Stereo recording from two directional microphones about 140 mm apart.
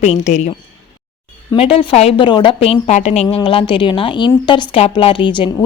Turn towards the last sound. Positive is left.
turn(degrees=35)  # may be behind; listen again after turning